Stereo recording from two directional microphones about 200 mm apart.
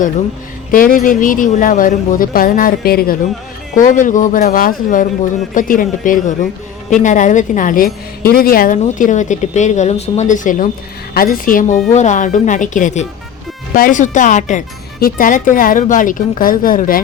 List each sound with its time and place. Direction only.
0.7 s a woman's voice: 45° left (ahead or behind)